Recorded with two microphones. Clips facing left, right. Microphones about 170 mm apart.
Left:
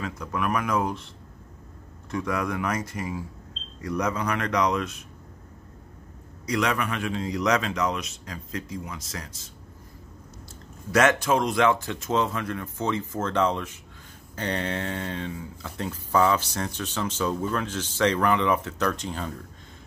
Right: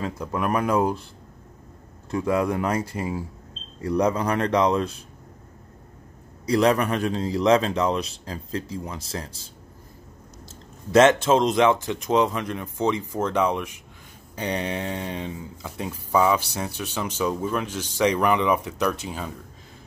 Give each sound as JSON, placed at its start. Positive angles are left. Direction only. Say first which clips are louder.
{"t": 0.0, "sound": "a man's voice", "louder": "right 3 dB", "side_deg": -30}
{"t": 2.0, "sound": "a man's voice", "louder": "right 5 dB", "side_deg": -30}
{"t": 6.4, "sound": "a man's voice", "louder": "right 6 dB", "side_deg": -35}
{"t": 10.9, "sound": "speech", "louder": "right 5 dB", "side_deg": -25}